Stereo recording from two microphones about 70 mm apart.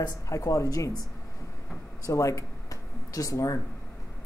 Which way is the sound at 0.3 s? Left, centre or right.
Left.